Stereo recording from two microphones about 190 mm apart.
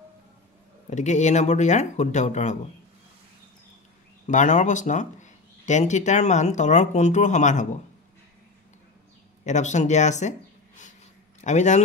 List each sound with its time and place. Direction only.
0.8 s speech: 40° left (ahead or behind)
4.3 s speech: 40° left (ahead or behind)
9.4 s speech: 40° left (ahead or behind)
11.4 s speech: 40° left (ahead or behind)